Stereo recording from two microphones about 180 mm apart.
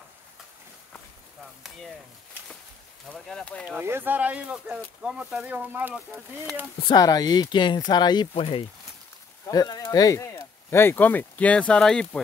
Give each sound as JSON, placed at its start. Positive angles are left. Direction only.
{"t": 3.1, "sound": "speech", "side_deg": 5}
{"t": 3.8, "sound": "speech", "side_deg": -10}
{"t": 6.8, "sound": "speech", "side_deg": 25}